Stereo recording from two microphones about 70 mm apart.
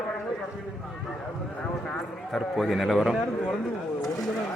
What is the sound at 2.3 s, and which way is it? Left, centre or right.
Speech, centre.